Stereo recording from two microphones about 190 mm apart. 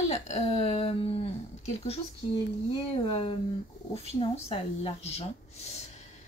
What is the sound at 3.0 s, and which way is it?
A woman's voice, 30° left (ahead or behind).